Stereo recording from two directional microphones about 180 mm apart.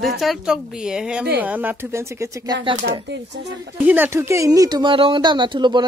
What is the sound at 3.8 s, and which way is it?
Speech, 10° right (ahead or behind).